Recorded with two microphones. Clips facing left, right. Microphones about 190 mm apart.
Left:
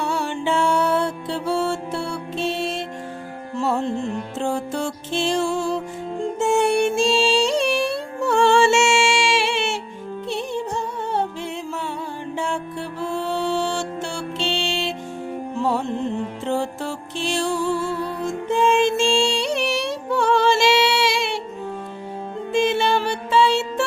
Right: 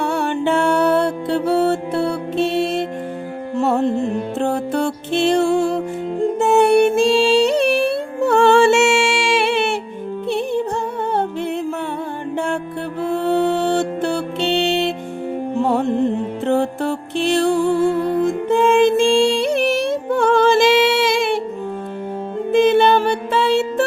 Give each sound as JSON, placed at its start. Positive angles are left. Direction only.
{"t": 0.0, "sound": "music", "side_deg": -60}
{"t": 13.0, "sound": "music", "side_deg": -60}
{"t": 22.5, "sound": "music", "side_deg": -55}